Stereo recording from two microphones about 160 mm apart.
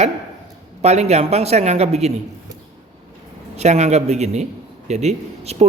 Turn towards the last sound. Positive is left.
turn(degrees=-45)  # may be behind; listen again after turning